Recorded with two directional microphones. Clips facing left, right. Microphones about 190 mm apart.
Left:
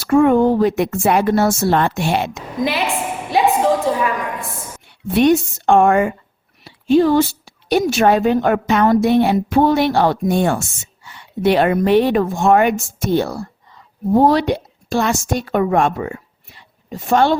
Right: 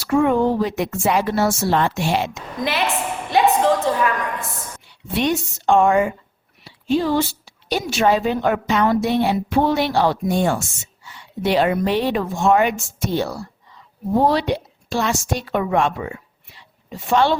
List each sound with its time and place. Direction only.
0.0 s a woman's voice: 50° left (ahead or behind)
2.6 s a woman's voice: centre (ahead or behind)
2.8 s a sound: 5° left (ahead or behind)
3.8 s a woman's voice: 5° left (ahead or behind)
4.9 s a woman's voice: 55° left (ahead or behind)